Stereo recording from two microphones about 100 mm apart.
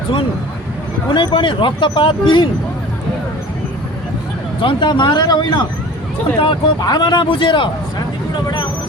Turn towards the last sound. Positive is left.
turn(degrees=55)  # may be behind; listen again after turning